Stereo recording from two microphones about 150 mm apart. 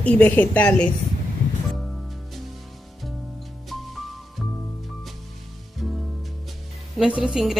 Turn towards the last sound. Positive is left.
turn(degrees=-5)  # may be behind; listen again after turning